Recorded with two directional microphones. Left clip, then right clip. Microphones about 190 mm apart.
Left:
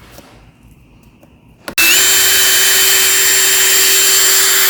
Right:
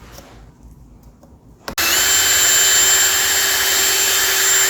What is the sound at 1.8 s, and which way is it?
Drill, 35° left (ahead or behind).